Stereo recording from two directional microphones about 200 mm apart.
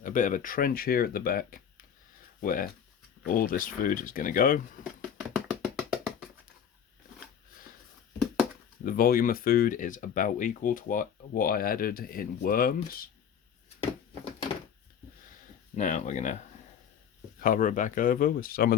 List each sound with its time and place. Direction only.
0.0 s speech: 40° left (ahead or behind)
5.6 s tap: centre (ahead or behind)
8.8 s speech: 45° left (ahead or behind)
15.7 s speech: 35° left (ahead or behind)
17.4 s speech: 45° left (ahead or behind)